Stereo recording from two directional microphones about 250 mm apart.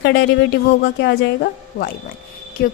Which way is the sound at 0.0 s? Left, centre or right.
Left.